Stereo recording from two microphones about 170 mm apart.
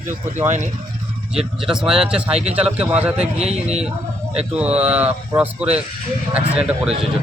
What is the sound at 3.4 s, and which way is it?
Speech, 40° right (ahead or behind).